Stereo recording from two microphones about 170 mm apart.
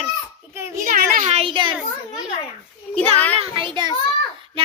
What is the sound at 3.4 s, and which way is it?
Speech, 30° right (ahead or behind).